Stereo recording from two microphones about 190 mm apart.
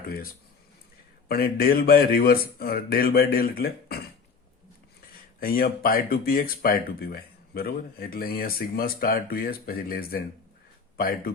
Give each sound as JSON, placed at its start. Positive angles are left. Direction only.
{"t": 1.3, "sound": "speech", "side_deg": 55}
{"t": 5.4, "sound": "speech", "side_deg": 50}